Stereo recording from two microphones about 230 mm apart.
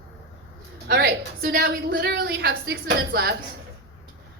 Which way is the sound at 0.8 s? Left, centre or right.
Right.